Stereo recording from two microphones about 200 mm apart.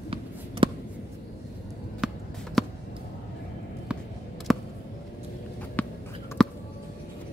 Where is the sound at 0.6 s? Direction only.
25° right (ahead or behind).